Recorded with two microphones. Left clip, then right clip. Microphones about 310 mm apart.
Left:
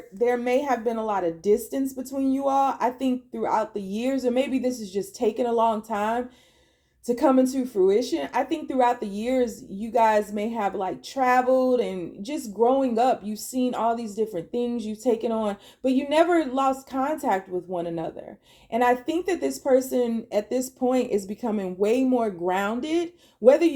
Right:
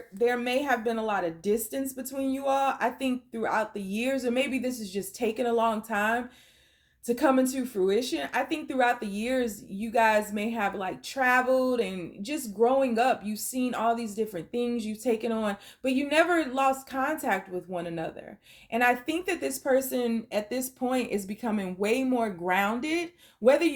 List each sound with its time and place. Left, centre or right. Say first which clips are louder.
0.2 s speech: left 4 dB; right